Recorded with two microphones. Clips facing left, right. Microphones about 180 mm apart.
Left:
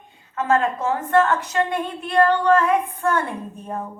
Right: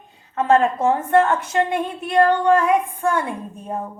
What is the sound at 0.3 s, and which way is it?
A woman's voice, 35° right (ahead or behind).